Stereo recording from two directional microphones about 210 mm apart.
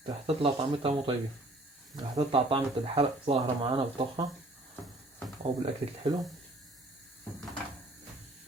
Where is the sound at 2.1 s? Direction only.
25° right (ahead or behind).